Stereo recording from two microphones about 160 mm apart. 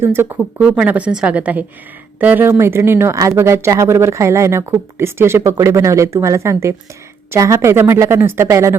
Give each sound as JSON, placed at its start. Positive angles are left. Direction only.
{"t": 0.0, "sound": "speech", "side_deg": -15}